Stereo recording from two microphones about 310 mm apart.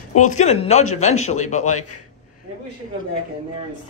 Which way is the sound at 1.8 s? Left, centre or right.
Left.